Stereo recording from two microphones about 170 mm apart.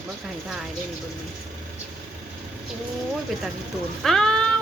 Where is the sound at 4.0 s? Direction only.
5° left (ahead or behind).